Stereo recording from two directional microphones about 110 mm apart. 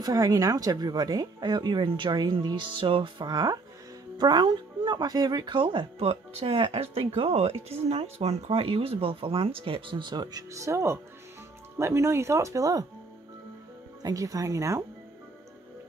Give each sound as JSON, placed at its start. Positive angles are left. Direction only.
{"t": 0.0, "sound": "speech", "side_deg": -35}
{"t": 14.0, "sound": "speech", "side_deg": -30}